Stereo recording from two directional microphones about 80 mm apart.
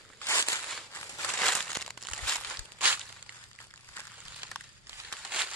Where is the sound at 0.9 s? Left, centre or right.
Left.